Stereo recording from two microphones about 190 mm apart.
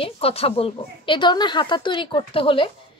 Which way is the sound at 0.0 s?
30° left (ahead or behind).